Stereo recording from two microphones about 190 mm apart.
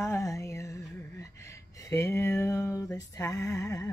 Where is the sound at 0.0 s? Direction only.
15° left (ahead or behind).